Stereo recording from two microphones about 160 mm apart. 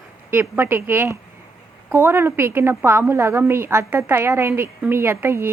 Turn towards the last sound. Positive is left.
turn(degrees=-15)  # may be behind; listen again after turning